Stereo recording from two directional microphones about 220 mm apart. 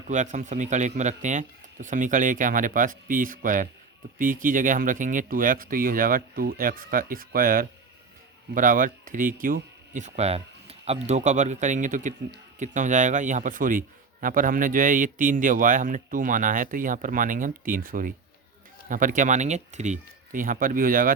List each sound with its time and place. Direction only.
0.1 s speech: 35° right (ahead or behind)